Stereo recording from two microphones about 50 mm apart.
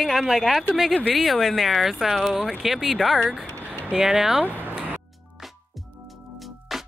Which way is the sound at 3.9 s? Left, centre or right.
Centre.